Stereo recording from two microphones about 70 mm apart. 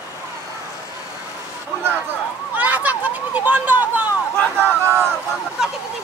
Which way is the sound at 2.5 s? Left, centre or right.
Right.